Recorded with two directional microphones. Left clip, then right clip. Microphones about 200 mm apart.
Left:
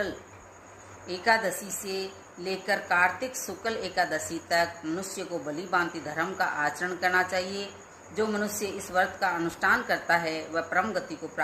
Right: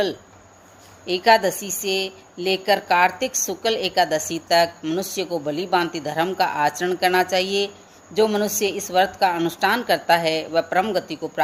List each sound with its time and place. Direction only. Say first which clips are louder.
1.0 s a woman's voice: right 9 dB; 45° right (ahead or behind)